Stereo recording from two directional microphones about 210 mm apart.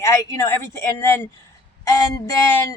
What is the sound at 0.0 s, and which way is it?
A man's voice, 15° left (ahead or behind).